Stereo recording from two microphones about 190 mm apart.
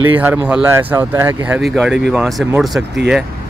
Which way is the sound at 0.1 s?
10° right (ahead or behind).